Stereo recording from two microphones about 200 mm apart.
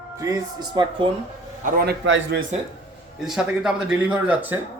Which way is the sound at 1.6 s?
50° right (ahead or behind).